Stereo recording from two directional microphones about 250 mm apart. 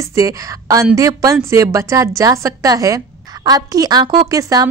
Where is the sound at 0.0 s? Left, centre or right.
Centre.